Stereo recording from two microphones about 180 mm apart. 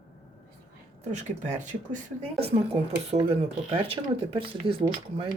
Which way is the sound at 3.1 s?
35° right (ahead or behind).